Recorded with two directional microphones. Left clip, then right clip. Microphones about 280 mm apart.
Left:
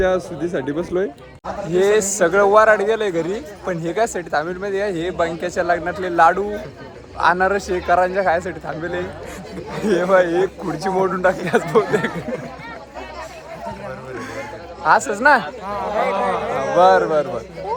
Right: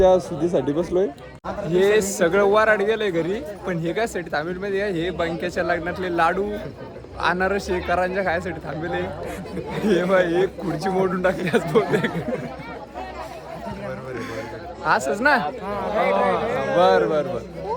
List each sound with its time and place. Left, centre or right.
0.0 s a man's voice: centre
14.8 s speech: centre